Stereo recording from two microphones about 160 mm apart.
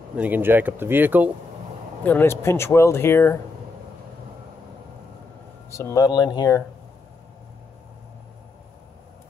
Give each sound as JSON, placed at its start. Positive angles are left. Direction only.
{"t": 0.1, "sound": "speech", "side_deg": -10}
{"t": 2.0, "sound": "speech", "side_deg": 15}
{"t": 5.7, "sound": "speech", "side_deg": 20}